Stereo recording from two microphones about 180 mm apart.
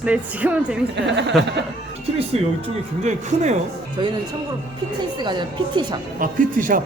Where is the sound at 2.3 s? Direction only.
35° right (ahead or behind).